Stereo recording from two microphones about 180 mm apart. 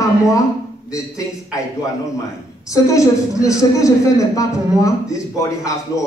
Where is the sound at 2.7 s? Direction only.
20° left (ahead or behind).